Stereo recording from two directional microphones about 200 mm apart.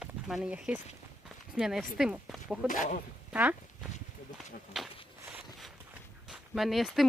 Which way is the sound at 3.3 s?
10° right (ahead or behind).